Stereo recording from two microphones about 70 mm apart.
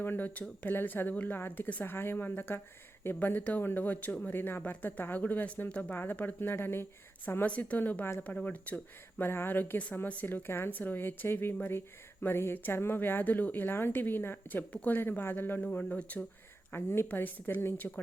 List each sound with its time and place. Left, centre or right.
0.0 s a woman's voice: left
7.4 s speech: centre
15.6 s speech: centre
16.7 s a woman's voice: left